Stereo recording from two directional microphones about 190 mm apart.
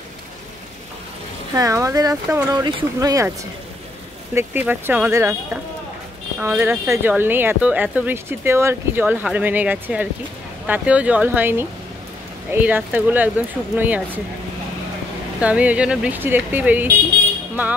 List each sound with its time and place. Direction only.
1.5 s speech: 15° right (ahead or behind)
4.3 s speech: 10° right (ahead or behind)
15.4 s speech: 5° right (ahead or behind)